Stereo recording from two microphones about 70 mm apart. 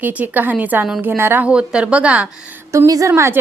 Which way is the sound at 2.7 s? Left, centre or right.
Right.